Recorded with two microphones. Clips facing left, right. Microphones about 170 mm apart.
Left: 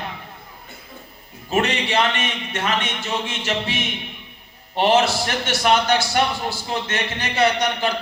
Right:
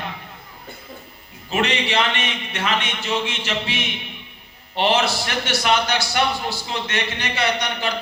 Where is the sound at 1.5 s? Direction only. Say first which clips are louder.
Left 1 dB; 45° left (ahead or behind).